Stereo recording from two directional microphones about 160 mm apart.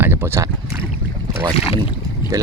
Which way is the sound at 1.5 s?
35° left (ahead or behind).